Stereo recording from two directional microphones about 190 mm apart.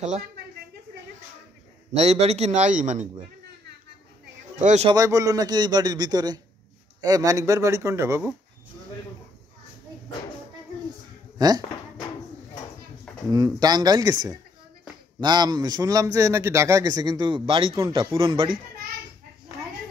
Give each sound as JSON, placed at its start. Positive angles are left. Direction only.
{"t": 2.0, "sound": "a man's voice", "side_deg": -35}
{"t": 4.6, "sound": "speech", "side_deg": -40}
{"t": 4.8, "sound": "a man's voice", "side_deg": -20}
{"t": 11.3, "sound": "speech", "side_deg": -20}
{"t": 13.3, "sound": "a man's voice", "side_deg": -20}
{"t": 17.7, "sound": "speech", "side_deg": -15}
{"t": 18.1, "sound": "a man's voice", "side_deg": -30}